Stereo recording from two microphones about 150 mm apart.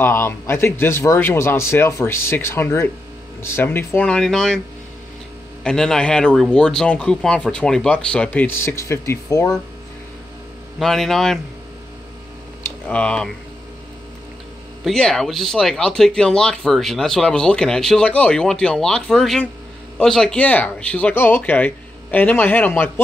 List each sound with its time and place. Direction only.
0.0 s speech: 15° left (ahead or behind)
5.6 s speech: 5° left (ahead or behind); by 9.6 s 20° left (ahead or behind)
10.8 s speech: centre (ahead or behind)
12.8 s speech: 5° left (ahead or behind)
14.9 s speech: 5° left (ahead or behind)